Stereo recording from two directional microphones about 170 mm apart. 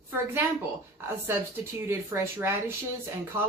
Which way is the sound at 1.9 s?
15° right (ahead or behind).